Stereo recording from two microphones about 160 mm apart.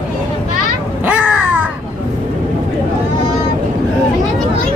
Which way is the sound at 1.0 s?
10° right (ahead or behind).